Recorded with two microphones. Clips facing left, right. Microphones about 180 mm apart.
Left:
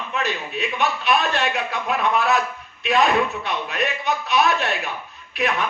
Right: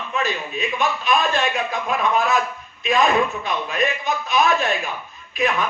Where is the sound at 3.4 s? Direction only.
70° left (ahead or behind).